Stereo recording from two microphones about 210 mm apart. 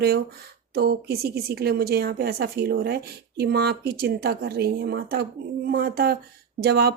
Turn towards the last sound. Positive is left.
turn(degrees=-50)  # may be behind; listen again after turning